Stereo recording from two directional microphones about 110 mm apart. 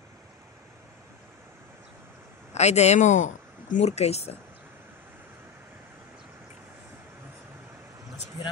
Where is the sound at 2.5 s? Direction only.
90° left.